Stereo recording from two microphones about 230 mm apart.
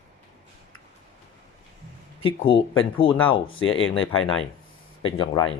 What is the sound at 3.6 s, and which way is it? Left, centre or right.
Speech, left.